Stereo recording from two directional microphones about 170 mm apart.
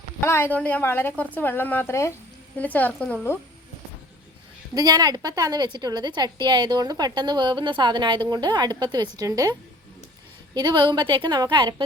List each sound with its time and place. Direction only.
0.2 s a woman's voice: 15° left (ahead or behind)
4.7 s a woman's voice: 25° right (ahead or behind)